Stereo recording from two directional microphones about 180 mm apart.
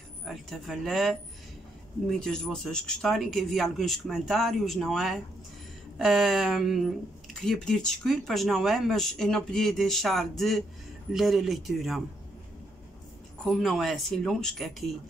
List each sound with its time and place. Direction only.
0.2 s speech: centre (ahead or behind)
13.5 s speech: centre (ahead or behind)